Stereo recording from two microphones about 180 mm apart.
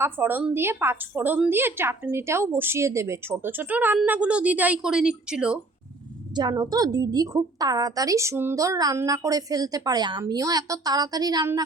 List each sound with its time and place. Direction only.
0.0 s a woman's voice: 10° right (ahead or behind)
6.3 s a woman's voice: 20° right (ahead or behind)